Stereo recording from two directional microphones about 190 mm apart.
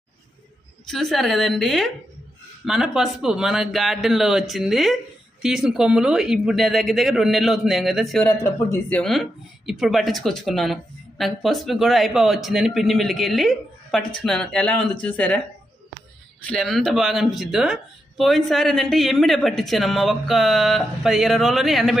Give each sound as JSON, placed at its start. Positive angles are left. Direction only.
{"t": 0.9, "sound": "a woman's voice", "side_deg": 0}
{"t": 16.4, "sound": "a woman's voice", "side_deg": 5}